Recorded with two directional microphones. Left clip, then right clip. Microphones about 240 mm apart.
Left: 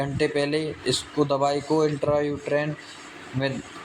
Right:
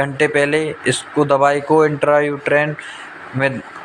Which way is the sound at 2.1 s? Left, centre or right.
Centre.